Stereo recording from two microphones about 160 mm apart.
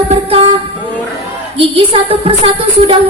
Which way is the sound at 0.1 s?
35° right (ahead or behind).